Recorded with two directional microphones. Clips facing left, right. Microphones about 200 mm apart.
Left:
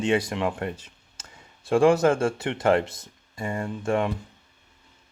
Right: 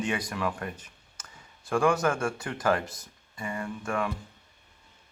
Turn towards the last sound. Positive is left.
turn(degrees=25)  # may be behind; listen again after turning